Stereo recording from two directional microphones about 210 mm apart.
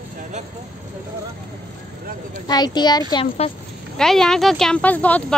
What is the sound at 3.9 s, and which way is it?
Speech, centre (ahead or behind).